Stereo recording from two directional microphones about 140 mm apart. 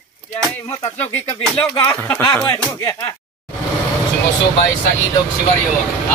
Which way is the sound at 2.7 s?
20° left (ahead or behind).